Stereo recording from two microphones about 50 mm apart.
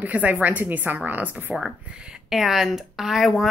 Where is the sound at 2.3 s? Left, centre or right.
Centre.